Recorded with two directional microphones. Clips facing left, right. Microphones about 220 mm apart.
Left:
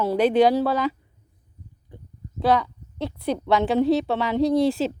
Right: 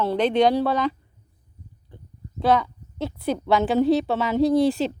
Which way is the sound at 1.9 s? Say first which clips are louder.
Left 2 dB; 15° left (ahead or behind).